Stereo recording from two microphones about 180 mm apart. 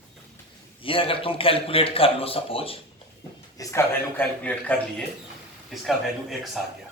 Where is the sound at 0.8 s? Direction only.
30° left (ahead or behind).